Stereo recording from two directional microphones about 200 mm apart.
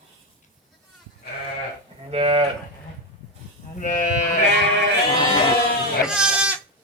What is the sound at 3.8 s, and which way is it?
Sheep, 40° left (ahead or behind).